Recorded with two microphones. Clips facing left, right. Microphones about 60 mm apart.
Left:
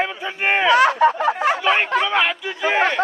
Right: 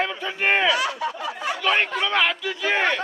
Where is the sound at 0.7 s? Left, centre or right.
Left.